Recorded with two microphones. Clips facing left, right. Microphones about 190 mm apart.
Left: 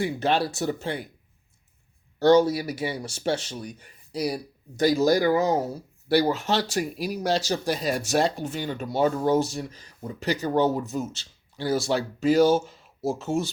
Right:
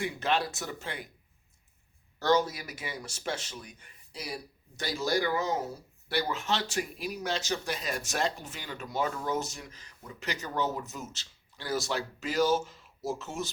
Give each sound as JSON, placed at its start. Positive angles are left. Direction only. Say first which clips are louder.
{"t": 0.0, "sound": "speech", "louder": "left 6 dB", "side_deg": 35}
{"t": 2.1, "sound": "speech", "louder": "left 9 dB", "side_deg": 30}